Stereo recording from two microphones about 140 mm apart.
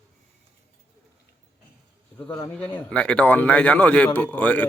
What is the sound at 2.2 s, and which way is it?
A man's voice, 15° left (ahead or behind).